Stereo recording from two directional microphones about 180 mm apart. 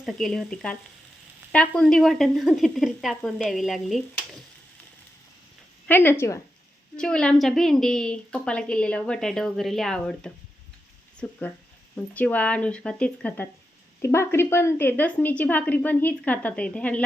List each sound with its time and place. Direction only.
0.0 s a woman's voice: centre (ahead or behind)
5.9 s a woman's voice: 10° left (ahead or behind)